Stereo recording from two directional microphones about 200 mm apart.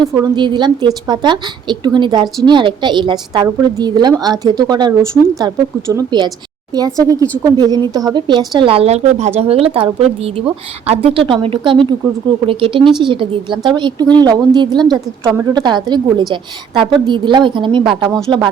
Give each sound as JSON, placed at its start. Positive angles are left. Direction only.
{"t": 0.0, "sound": "speech", "side_deg": -20}